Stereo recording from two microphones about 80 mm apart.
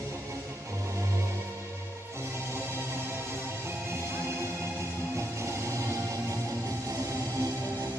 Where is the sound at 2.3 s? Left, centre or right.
Right.